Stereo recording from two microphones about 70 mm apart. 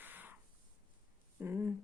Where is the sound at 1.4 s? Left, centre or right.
Right.